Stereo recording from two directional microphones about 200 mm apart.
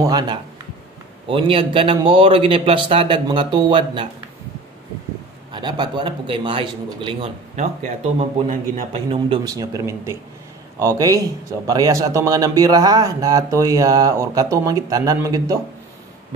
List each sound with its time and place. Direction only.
0.0 s a man's voice: 20° right (ahead or behind)
5.5 s a man's voice: 20° right (ahead or behind)
7.5 s a man's voice: 35° right (ahead or behind); by 15.6 s 15° right (ahead or behind)